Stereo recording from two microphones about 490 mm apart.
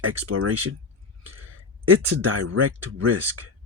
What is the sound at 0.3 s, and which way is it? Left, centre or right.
Speech, right.